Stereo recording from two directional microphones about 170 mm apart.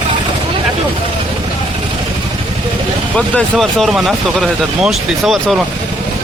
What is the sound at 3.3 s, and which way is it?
Speech, centre (ahead or behind).